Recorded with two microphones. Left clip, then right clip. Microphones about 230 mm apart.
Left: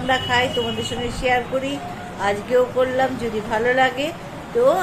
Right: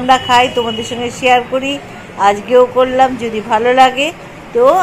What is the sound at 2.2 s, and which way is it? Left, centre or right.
A woman's voice, right.